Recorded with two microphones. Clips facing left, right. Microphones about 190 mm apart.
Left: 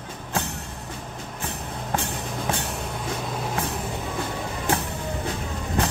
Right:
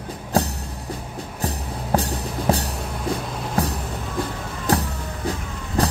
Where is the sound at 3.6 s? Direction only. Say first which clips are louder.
Right 9 dB; 40° right (ahead or behind).